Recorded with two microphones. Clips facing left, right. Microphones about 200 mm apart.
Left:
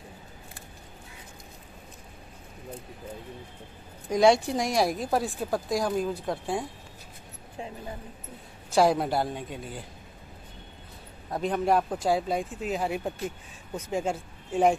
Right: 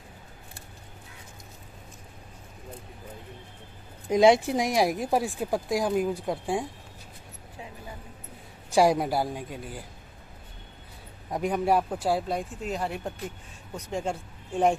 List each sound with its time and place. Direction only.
4.1 s a woman's voice: 20° right (ahead or behind)
8.6 s a woman's voice: 15° right (ahead or behind)
11.2 s a man's voice: 15° right (ahead or behind); by 14.8 s 5° left (ahead or behind)